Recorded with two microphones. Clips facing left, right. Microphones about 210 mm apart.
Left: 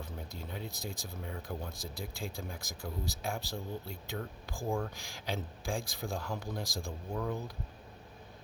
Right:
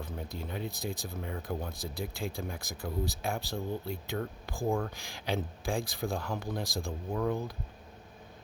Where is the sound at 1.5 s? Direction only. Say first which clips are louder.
Right 4 dB; 60° right (ahead or behind).